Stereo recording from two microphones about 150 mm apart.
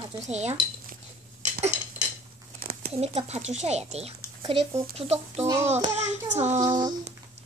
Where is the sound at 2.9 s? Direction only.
45° right (ahead or behind).